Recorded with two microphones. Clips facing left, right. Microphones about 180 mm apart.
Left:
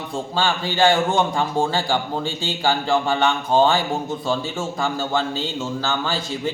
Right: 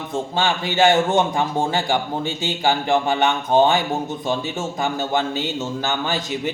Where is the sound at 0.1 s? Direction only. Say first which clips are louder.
Right 1 dB; 20° right (ahead or behind).